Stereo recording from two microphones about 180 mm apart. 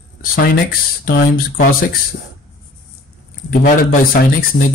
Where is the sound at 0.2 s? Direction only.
55° left (ahead or behind).